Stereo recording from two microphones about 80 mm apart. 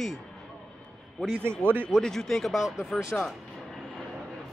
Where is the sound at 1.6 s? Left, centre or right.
Right.